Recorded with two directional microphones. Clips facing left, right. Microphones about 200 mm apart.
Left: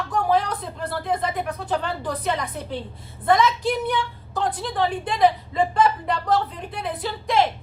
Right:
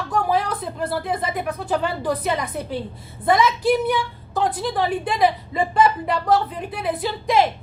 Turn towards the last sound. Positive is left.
turn(degrees=-10)  # may be behind; listen again after turning